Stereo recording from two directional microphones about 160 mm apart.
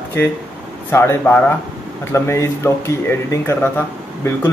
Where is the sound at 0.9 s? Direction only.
15° left (ahead or behind).